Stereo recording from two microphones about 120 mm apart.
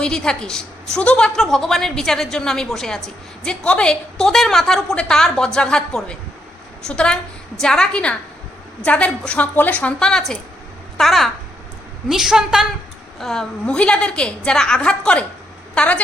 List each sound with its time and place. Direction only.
0.0 s a woman's voice: 5° left (ahead or behind)